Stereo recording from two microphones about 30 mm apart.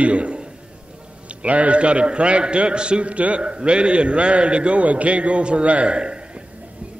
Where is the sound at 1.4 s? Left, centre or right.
Right.